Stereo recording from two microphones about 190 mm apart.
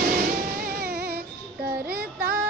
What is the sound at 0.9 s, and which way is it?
Music, 55° right (ahead or behind).